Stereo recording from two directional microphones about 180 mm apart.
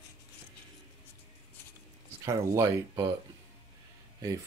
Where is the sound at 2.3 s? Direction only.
15° right (ahead or behind).